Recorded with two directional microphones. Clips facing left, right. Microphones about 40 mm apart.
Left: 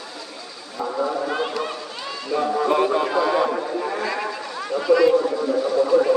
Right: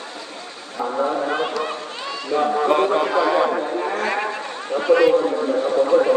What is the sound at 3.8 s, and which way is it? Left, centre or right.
Speech, right.